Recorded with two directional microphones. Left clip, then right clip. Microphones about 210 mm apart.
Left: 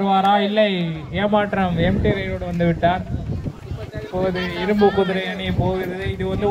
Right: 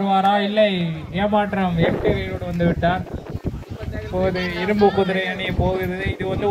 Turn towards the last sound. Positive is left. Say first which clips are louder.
# even
turn(degrees=-40)  # may be behind; listen again after turning